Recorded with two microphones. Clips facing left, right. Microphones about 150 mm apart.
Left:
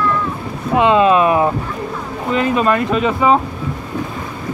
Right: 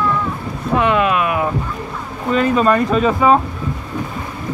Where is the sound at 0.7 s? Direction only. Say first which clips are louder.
Left 4 dB; 20° left (ahead or behind).